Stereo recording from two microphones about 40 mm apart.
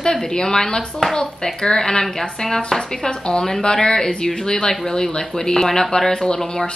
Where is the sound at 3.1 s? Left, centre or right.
Left.